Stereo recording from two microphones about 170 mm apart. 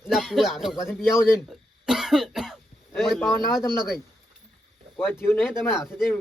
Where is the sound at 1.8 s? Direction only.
Centre (ahead or behind).